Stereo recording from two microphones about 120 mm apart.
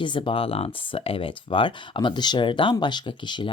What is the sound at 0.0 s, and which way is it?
Speech, 45° left (ahead or behind).